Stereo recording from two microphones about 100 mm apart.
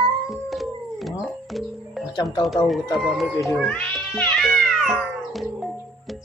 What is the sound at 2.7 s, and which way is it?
Speech, centre (ahead or behind).